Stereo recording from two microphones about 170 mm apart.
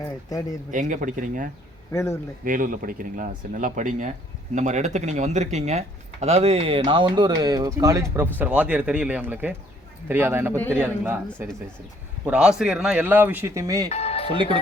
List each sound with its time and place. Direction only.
0.0 s speech: 20° left (ahead or behind)
0.7 s speech: 50° right (ahead or behind)
1.9 s speech: 15° left (ahead or behind)
2.4 s speech: 50° right (ahead or behind); by 8.3 s 20° right (ahead or behind)
8.4 s speech: 10° right (ahead or behind)
13.9 s speech: 35° left (ahead or behind)